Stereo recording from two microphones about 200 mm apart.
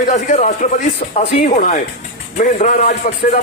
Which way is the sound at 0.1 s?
40° left (ahead or behind).